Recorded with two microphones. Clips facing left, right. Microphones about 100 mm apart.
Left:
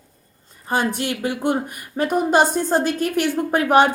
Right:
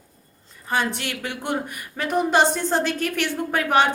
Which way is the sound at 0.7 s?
40° left (ahead or behind).